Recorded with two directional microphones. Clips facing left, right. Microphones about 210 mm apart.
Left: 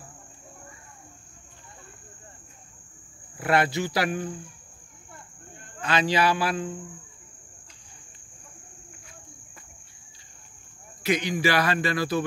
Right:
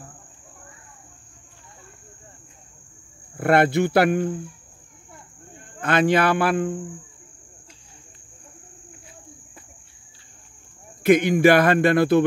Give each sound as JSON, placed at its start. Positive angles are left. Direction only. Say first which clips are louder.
{"t": 3.3, "sound": "speech", "louder": "right 6 dB", "side_deg": -55}
{"t": 5.8, "sound": "speech", "louder": "right 5 dB", "side_deg": -55}
{"t": 11.0, "sound": "speech", "louder": "right 9 dB", "side_deg": -55}